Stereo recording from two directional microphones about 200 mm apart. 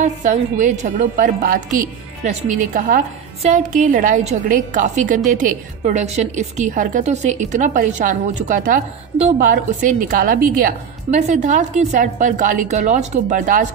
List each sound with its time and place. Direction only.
0.0 s a woman's voice: 40° right (ahead or behind)